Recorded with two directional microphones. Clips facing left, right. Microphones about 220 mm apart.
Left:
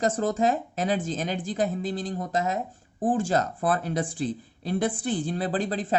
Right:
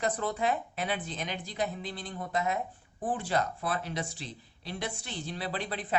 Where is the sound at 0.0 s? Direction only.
45° left (ahead or behind).